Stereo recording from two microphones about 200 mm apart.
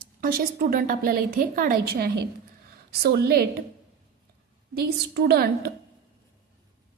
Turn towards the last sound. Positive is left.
turn(degrees=-50)  # may be behind; listen again after turning